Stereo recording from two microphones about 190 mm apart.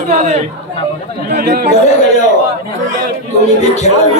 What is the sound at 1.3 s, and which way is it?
Speech, 50° right (ahead or behind).